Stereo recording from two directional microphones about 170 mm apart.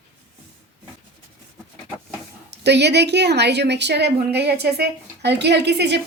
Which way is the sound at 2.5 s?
85° right.